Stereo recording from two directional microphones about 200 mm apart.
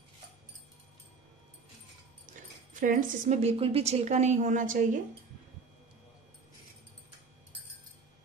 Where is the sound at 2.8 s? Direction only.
40° right (ahead or behind).